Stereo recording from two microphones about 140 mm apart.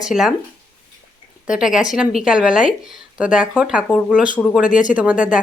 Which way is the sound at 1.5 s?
5° right (ahead or behind).